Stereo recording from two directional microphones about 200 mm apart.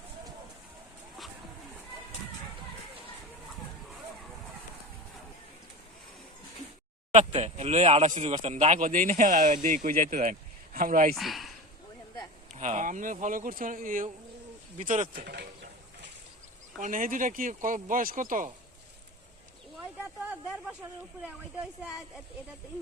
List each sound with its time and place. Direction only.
7.1 s speech: 35° right (ahead or behind)
11.1 s speech: centre (ahead or behind)
12.5 s speech: 35° right (ahead or behind)
15.1 s speech: 50° right (ahead or behind)
16.8 s speech: 40° right (ahead or behind)
20.2 s a sound: 5° right (ahead or behind)
21.2 s a woman's voice: 5° right (ahead or behind)